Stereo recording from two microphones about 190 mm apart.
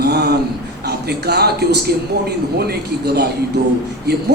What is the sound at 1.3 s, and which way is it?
Speech, 55° right (ahead or behind).